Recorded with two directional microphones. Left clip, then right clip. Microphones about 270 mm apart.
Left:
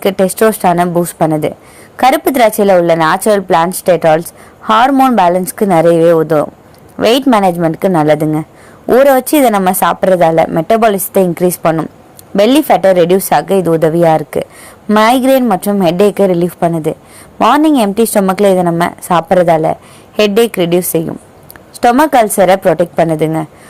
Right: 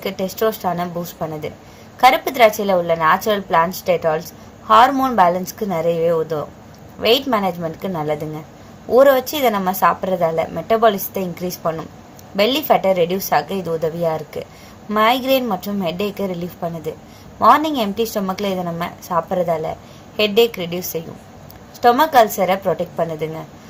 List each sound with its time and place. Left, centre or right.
0.0 s a woman's voice: left